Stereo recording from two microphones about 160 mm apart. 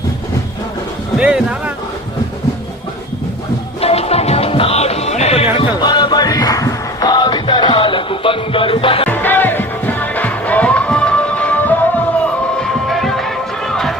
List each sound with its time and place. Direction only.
1.2 s speech: 5° right (ahead or behind)
3.8 s music: 40° left (ahead or behind)
5.5 s music: 25° left (ahead or behind)
9.0 s music: 10° left (ahead or behind)